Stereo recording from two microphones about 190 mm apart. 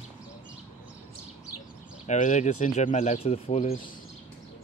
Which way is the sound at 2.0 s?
40° left (ahead or behind).